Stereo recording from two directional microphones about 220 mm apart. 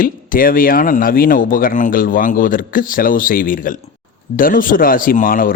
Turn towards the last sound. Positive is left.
turn(degrees=40)  # may be behind; listen again after turning